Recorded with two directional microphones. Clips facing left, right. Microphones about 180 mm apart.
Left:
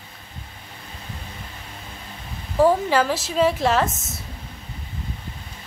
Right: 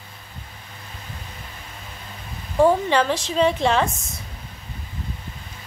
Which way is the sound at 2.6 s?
5° left (ahead or behind).